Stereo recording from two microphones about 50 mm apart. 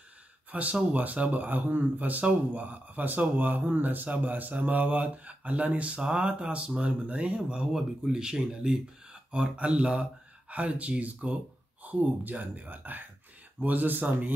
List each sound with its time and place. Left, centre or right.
0.5 s speech: right